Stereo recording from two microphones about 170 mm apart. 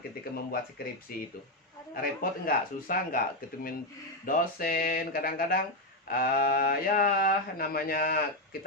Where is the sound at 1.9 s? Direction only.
55° left (ahead or behind).